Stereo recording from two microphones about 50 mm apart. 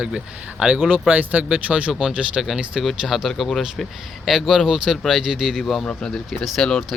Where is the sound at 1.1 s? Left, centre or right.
Right.